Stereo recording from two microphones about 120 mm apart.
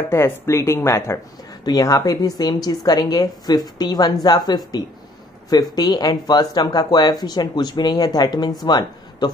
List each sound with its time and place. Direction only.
0.1 s speech: 25° left (ahead or behind)
5.8 s speech: 35° left (ahead or behind)